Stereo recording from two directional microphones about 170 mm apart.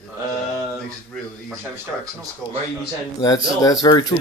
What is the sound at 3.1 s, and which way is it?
Speech, 20° left (ahead or behind).